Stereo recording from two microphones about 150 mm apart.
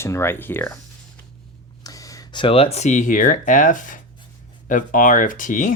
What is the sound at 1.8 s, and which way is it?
Speech, 25° left (ahead or behind).